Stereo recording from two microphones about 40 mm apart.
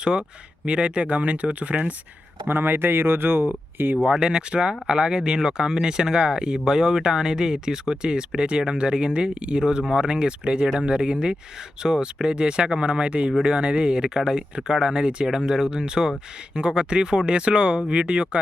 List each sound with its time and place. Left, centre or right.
0.0 s speech: right
2.5 s speech: right
4.2 s speech: right